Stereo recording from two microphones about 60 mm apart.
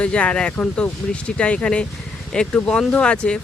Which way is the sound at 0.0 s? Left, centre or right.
Centre.